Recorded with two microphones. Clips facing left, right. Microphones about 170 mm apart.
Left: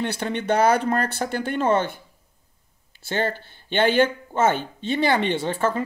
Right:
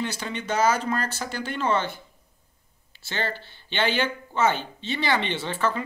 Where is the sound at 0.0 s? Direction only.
60° left (ahead or behind).